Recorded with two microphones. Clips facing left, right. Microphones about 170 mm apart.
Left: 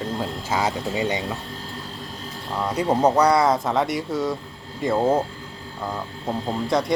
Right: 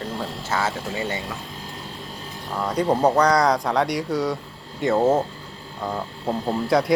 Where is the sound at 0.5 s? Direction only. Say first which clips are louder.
Left 2 dB; 15° left (ahead or behind).